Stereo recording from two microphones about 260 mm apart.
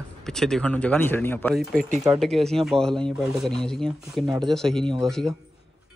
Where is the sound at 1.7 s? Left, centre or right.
Right.